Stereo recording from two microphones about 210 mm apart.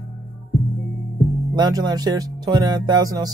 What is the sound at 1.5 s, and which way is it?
Speech, 20° right (ahead or behind).